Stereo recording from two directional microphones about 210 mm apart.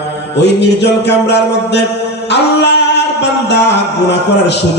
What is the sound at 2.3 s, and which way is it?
Singing, 55° left (ahead or behind).